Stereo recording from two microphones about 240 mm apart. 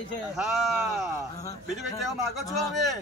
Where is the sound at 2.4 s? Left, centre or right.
Centre.